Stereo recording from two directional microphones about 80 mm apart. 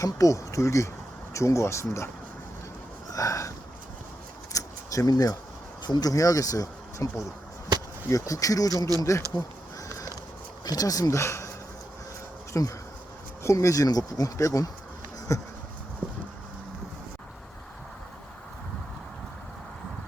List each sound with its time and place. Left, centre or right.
0.0 s speech: left
3.1 s a sound: left
4.5 s a sound: left
5.8 s speech: left
10.7 s speech: left
12.5 s speech: left